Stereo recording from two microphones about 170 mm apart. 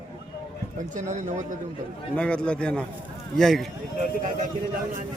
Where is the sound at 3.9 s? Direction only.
45° right (ahead or behind).